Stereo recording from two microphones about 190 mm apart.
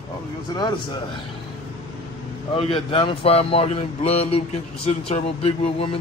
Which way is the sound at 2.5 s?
30° left (ahead or behind).